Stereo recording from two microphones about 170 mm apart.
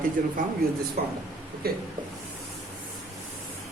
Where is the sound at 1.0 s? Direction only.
65° right (ahead or behind).